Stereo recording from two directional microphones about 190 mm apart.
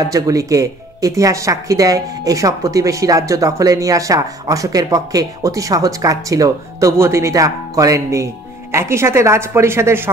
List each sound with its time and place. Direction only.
0.0 s speech: 20° right (ahead or behind)